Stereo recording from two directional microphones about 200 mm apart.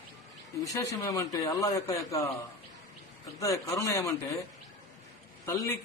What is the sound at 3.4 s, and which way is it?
Speech, 15° left (ahead or behind).